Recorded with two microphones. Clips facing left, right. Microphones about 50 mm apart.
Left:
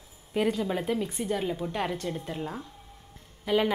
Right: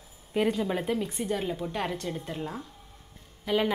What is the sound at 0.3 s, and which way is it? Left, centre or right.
Speech, centre.